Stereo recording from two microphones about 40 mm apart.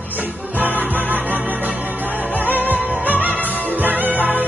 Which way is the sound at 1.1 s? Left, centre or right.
Right.